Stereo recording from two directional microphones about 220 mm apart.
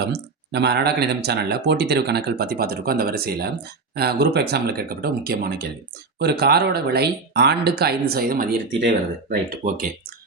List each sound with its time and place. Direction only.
0.0 s speech: 50° right (ahead or behind)